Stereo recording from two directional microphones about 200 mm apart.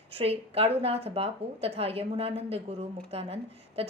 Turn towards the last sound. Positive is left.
turn(degrees=-30)  # may be behind; listen again after turning